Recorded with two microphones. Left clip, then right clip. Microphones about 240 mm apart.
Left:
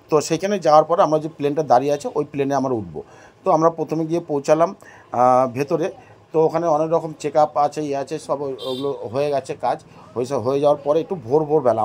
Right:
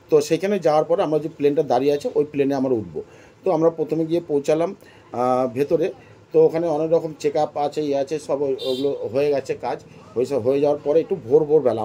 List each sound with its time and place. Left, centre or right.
0.1 s speech: left